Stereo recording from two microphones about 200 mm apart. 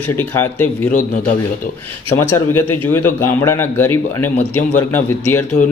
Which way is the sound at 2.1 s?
10° left (ahead or behind).